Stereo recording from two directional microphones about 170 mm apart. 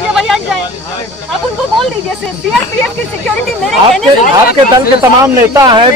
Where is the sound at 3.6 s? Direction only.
Centre (ahead or behind).